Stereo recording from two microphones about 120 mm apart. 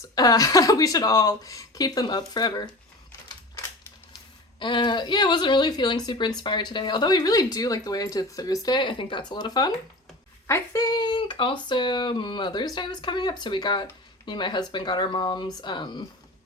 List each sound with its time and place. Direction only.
0.0 s speech: 30° left (ahead or behind)
4.6 s speech: 40° left (ahead or behind)